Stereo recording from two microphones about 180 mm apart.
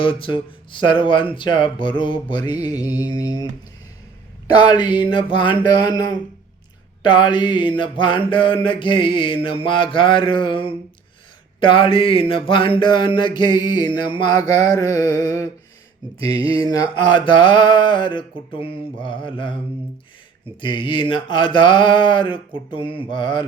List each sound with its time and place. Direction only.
0.0 s mantra: 30° left (ahead or behind)
4.5 s mantra: 25° left (ahead or behind)
16.2 s a sound: 30° right (ahead or behind)
16.6 s mantra: 20° left (ahead or behind)
20.6 s mantra: 25° left (ahead or behind)